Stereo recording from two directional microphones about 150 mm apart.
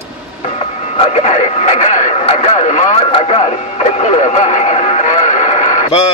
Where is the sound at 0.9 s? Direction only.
45° left (ahead or behind).